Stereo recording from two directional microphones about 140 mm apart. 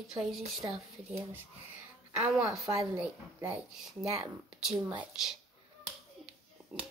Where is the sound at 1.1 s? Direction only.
20° right (ahead or behind).